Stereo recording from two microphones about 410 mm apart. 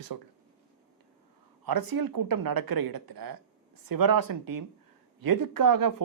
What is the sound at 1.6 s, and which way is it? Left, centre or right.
Speech, right.